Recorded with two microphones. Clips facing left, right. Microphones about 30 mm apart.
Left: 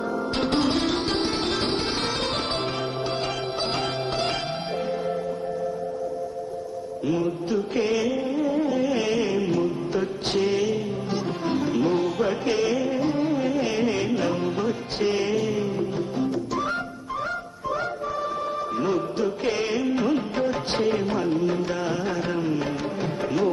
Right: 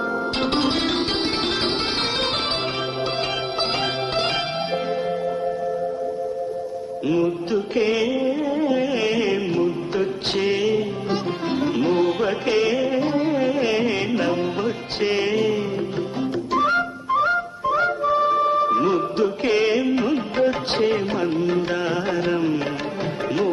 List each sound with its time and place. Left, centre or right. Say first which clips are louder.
0.3 s music: even; right
7.3 s music: right 3 dB; right
10.3 s music: right 3 dB; right
19.5 s music: right 7 dB; right